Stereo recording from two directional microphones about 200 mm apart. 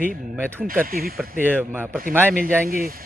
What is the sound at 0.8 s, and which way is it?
Speech, 45° right (ahead or behind).